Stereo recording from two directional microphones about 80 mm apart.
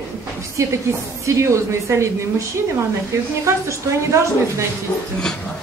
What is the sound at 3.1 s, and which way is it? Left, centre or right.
Speech, right.